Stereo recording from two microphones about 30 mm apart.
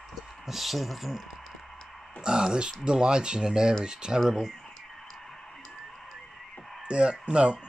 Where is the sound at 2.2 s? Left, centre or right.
Right.